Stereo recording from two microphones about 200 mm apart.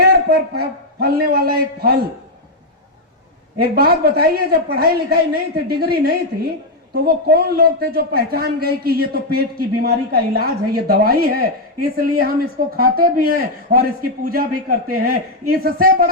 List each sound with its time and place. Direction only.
0.0 s a man's voice: 50° right (ahead or behind)
3.6 s a man's voice: 50° right (ahead or behind)